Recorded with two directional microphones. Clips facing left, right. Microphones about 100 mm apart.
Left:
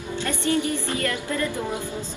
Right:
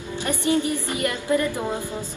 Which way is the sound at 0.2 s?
15° right (ahead or behind).